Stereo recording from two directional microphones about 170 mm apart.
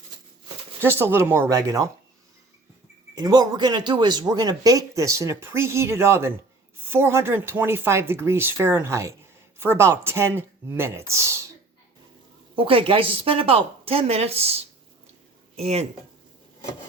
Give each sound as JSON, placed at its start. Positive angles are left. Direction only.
{"t": 0.8, "sound": "speech", "side_deg": -15}
{"t": 3.2, "sound": "speech", "side_deg": -20}
{"t": 12.5, "sound": "speech", "side_deg": -30}